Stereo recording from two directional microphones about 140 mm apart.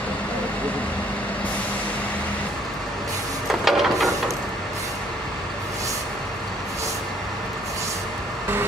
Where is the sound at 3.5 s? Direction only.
Centre (ahead or behind).